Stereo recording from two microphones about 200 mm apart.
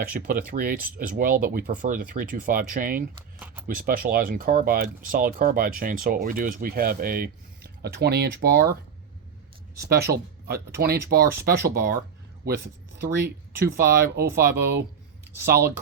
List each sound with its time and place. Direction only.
0.0 s speech: 45° right (ahead or behind)
9.9 s speech: 50° right (ahead or behind)
13.7 s speech: 50° right (ahead or behind)